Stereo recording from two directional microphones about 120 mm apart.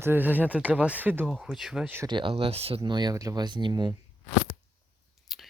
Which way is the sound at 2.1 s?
45° right (ahead or behind).